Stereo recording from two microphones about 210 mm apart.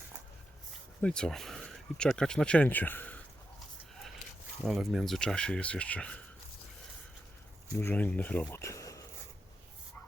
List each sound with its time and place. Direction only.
1.0 s speech: 5° left (ahead or behind)
4.6 s speech: centre (ahead or behind)
7.8 s speech: 10° left (ahead or behind)